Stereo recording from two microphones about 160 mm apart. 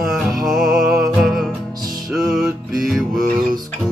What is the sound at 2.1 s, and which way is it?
Music, centre (ahead or behind).